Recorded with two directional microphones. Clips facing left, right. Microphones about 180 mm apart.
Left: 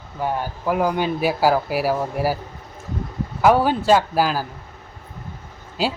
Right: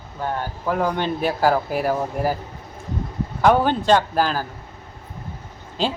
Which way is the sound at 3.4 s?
5° left (ahead or behind).